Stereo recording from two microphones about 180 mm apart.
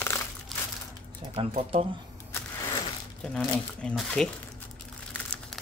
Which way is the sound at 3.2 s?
5° left (ahead or behind).